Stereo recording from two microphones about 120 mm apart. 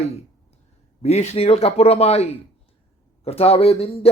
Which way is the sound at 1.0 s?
65° left (ahead or behind).